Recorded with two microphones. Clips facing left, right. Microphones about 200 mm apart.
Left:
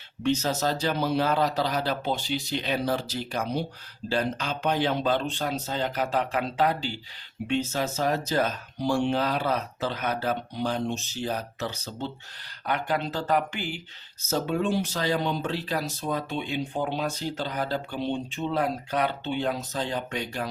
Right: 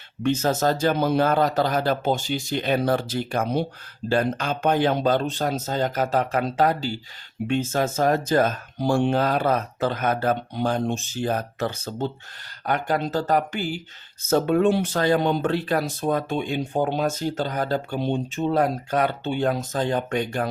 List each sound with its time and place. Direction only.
0.2 s speech: 50° right (ahead or behind)